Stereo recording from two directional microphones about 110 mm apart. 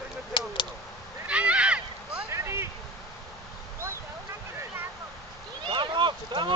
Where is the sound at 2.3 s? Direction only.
25° right (ahead or behind).